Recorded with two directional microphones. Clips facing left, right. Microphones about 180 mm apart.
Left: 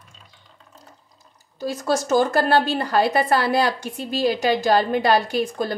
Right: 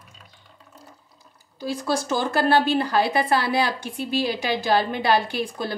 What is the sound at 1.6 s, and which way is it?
Speech, 45° left (ahead or behind).